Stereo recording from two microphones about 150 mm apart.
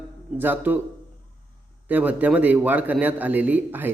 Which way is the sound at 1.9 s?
10° right (ahead or behind).